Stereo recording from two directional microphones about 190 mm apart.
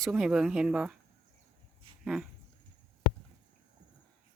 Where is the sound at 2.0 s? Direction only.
5° right (ahead or behind).